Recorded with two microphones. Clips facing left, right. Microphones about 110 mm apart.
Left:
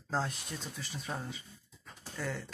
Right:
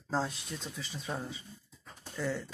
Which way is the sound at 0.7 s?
Centre (ahead or behind).